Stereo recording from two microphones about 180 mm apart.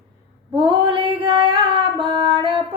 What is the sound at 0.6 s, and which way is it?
Female singing, 25° right (ahead or behind).